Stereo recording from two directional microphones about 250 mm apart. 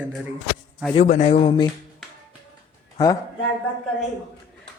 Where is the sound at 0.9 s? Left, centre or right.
Left.